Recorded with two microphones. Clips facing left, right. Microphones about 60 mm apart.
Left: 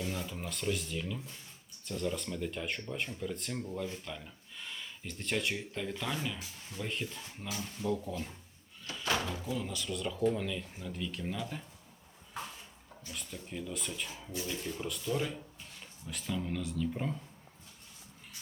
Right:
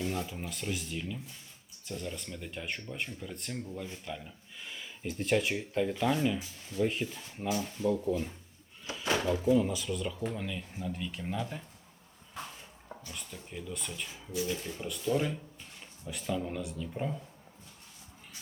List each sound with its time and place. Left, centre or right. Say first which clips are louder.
0.3 s speech: left 2 dB; centre
8.8 s a sound: right 2 dB; centre
9.1 s speech: right 12 dB; right
9.7 s speech: right 2 dB; centre
13.1 s speech: left 4 dB; centre